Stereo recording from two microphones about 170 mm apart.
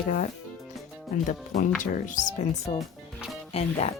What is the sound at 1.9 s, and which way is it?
Speech, 50° left (ahead or behind).